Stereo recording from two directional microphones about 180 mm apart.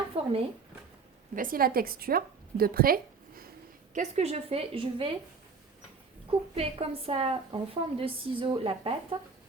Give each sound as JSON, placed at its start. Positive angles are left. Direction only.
{"t": 0.1, "sound": "a sound", "side_deg": -30}
{"t": 1.4, "sound": "a woman's voice", "side_deg": -55}
{"t": 3.9, "sound": "a woman's voice", "side_deg": -40}
{"t": 6.6, "sound": "a woman's voice", "side_deg": -35}